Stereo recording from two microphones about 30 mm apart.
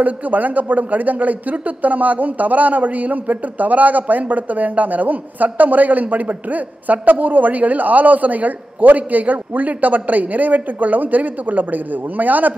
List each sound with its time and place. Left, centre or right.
0.0 s speech: right